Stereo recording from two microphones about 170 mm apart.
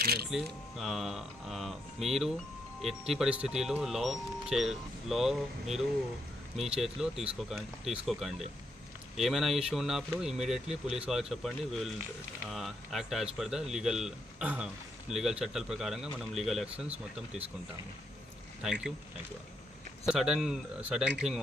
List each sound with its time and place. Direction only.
0.0 s a sound: 70° right (ahead or behind)
0.3 s speech: centre (ahead or behind)
18.6 s speech: 5° right (ahead or behind)
20.1 s speech: centre (ahead or behind)